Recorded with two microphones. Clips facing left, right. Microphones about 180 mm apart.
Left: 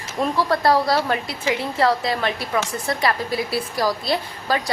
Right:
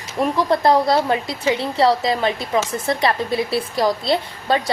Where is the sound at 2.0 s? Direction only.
20° right (ahead or behind).